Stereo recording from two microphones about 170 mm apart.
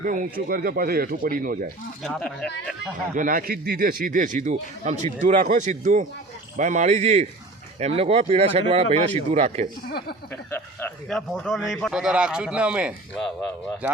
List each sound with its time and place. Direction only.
0.0 s speech: 50° right (ahead or behind)
2.0 s speech: 5° left (ahead or behind)
3.2 s speech: 55° right (ahead or behind)
10.5 s speech: 10° left (ahead or behind); by 14.0 s 10° right (ahead or behind)